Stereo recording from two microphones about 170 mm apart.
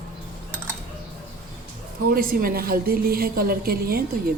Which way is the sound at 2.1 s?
60° right (ahead or behind).